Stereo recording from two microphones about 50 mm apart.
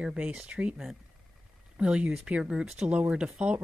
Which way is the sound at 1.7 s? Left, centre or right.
Right.